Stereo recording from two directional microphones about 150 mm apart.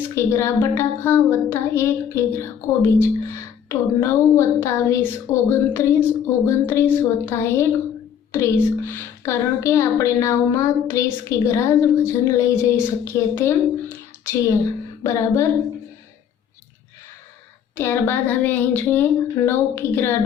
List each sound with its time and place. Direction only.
0.1 s a woman's voice: 15° left (ahead or behind)
15.0 s a woman's voice: 20° left (ahead or behind)
17.7 s a woman's voice: 15° left (ahead or behind)